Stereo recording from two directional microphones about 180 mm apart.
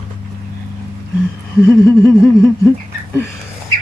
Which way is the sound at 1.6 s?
10° left (ahead or behind).